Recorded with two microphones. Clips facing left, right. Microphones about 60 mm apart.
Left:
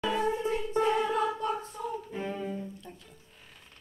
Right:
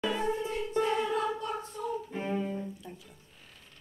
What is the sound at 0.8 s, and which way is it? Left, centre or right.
Choir, centre.